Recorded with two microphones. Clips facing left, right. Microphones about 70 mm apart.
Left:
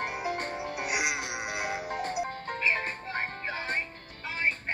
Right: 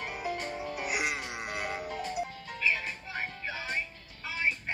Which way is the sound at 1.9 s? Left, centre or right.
Left.